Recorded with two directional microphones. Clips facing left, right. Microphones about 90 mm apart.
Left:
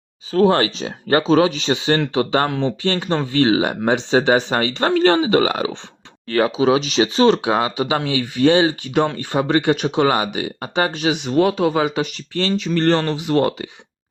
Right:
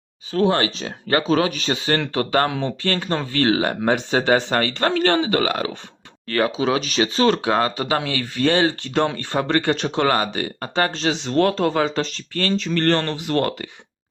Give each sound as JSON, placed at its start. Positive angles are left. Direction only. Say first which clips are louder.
{"t": 0.3, "sound": "speech", "louder": "left 4 dB", "side_deg": 35}